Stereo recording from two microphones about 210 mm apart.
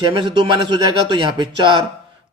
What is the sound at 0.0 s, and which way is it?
A man's voice, 25° right (ahead or behind).